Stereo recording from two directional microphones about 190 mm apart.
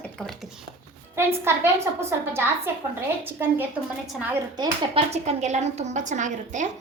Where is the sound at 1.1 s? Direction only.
15° right (ahead or behind).